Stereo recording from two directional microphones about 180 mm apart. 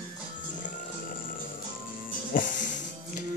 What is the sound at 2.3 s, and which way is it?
Music, 45° left (ahead or behind).